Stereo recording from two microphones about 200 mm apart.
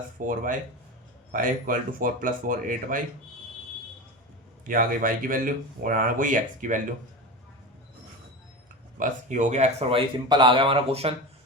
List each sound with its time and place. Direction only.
0.3 s speech: 40° right (ahead or behind)
4.6 s speech: 45° right (ahead or behind)
9.0 s speech: 40° right (ahead or behind)